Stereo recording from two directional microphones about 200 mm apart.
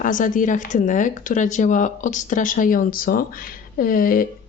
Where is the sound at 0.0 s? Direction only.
40° left (ahead or behind).